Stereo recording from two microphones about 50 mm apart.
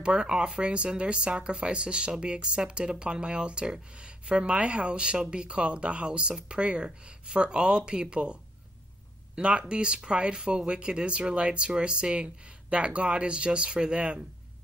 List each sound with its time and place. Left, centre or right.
0.0 s speech: centre